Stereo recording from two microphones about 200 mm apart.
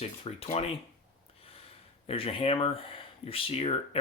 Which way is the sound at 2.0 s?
30° left (ahead or behind).